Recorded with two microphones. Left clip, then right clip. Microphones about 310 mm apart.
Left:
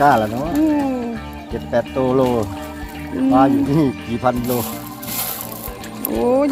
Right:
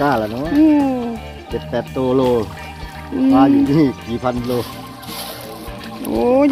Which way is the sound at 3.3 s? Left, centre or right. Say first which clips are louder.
Right 1 dB; left.